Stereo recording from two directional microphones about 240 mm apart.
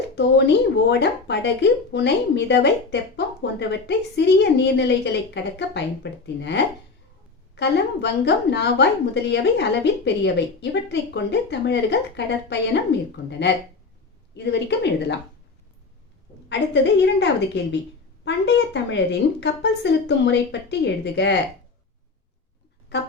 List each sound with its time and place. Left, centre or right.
0.2 s speech: left
14.3 s speech: left
16.5 s speech: left